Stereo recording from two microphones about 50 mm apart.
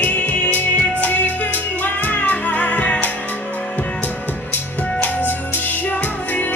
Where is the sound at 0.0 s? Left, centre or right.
Left.